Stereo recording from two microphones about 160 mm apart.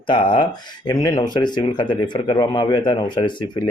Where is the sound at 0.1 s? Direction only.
30° left (ahead or behind).